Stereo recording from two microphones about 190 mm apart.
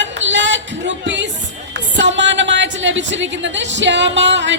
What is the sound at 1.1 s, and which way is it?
A woman's voice, 70° right (ahead or behind).